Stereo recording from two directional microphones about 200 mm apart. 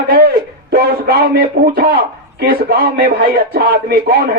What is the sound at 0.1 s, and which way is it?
A man's voice, 50° right (ahead or behind).